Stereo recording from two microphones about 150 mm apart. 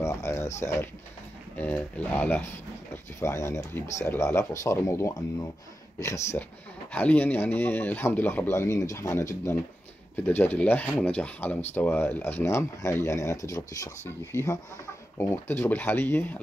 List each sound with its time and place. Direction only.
0.0 s speech: 20° left (ahead or behind)